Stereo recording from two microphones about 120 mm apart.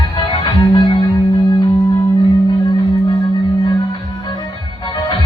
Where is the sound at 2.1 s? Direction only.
40° left (ahead or behind).